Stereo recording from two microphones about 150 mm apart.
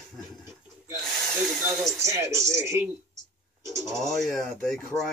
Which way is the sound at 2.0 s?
20° right (ahead or behind).